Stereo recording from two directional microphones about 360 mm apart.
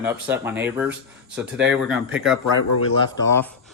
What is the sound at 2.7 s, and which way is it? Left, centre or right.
Speech, left.